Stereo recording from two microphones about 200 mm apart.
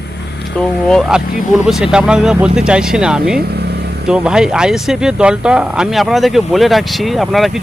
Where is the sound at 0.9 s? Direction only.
Centre (ahead or behind).